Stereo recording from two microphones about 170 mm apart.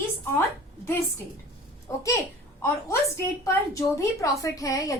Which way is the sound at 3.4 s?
20° left (ahead or behind).